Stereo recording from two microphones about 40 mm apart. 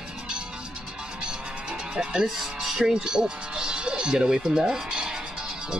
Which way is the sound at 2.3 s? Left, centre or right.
Centre.